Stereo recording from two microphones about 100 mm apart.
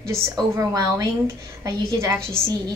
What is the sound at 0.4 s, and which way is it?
A woman's voice, 35° right (ahead or behind).